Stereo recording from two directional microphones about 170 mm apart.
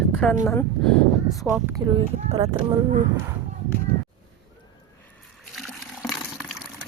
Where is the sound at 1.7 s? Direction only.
25° right (ahead or behind).